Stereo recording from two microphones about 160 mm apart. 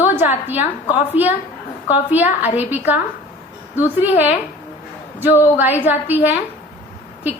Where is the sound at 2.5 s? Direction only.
10° right (ahead or behind).